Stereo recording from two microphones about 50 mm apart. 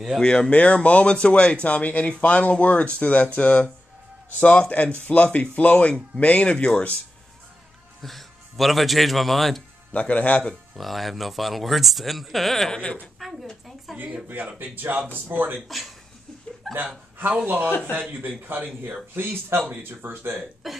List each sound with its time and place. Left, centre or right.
0.2 s speech: centre
0.5 s speech: left
8.0 s speech: centre
9.9 s speech: left
10.8 s speech: centre
13.2 s a sound: centre
13.9 s speech: centre
14.2 s speech: right
16.6 s hiccup: centre
18.2 s speech: right
20.6 s speech: centre